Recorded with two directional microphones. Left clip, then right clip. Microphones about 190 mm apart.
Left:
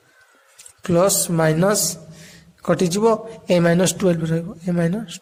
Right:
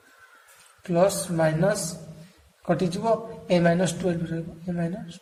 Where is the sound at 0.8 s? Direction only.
50° left (ahead or behind).